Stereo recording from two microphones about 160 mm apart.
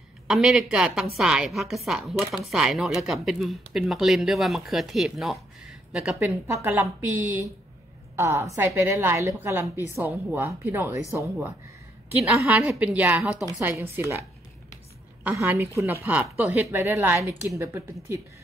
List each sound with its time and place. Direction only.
0.3 s speech: centre (ahead or behind)
6.1 s a woman's voice: 15° right (ahead or behind)
15.2 s a woman's voice: 15° right (ahead or behind)